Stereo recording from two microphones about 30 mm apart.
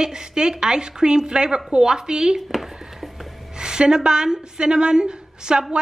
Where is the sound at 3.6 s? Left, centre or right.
Right.